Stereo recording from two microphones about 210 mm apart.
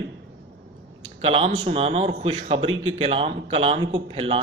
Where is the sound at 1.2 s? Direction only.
30° right (ahead or behind).